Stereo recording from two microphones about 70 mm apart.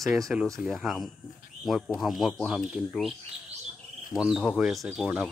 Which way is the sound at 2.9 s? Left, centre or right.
Centre.